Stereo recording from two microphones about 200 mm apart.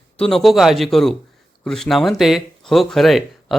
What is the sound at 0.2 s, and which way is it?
Speech, centre (ahead or behind).